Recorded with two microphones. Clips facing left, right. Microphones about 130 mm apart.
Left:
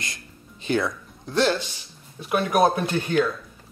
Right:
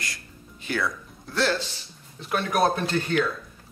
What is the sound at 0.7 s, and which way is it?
Speech, 20° left (ahead or behind).